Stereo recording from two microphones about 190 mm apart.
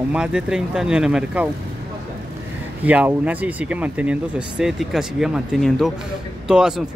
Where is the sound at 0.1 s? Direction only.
5° right (ahead or behind).